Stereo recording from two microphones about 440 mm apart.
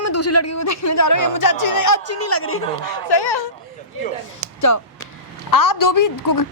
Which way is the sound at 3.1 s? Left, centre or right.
Left.